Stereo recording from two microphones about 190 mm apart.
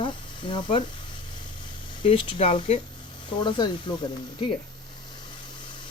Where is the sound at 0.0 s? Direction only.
25° left (ahead or behind).